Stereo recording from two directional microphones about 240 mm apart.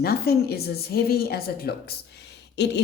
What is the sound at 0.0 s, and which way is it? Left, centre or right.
Speech, left.